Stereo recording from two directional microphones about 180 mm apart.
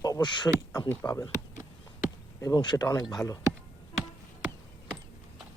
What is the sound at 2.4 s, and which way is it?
Speech, 25° left (ahead or behind).